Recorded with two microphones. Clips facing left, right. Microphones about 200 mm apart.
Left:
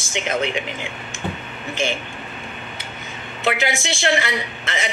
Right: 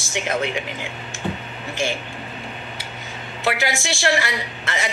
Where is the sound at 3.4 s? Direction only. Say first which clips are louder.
Left 1 dB; 20° left (ahead or behind).